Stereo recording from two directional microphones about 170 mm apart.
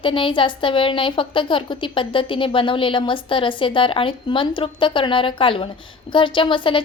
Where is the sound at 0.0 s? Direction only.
30° left (ahead or behind).